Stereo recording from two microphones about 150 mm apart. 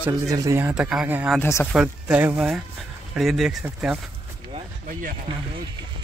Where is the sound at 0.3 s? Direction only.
20° right (ahead or behind).